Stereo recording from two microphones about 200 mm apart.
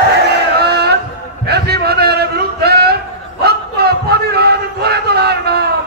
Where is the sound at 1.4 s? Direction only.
55° right (ahead or behind).